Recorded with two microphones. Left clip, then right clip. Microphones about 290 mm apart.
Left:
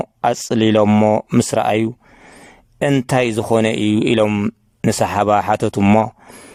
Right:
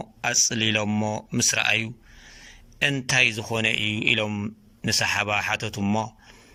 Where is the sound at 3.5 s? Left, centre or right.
Left.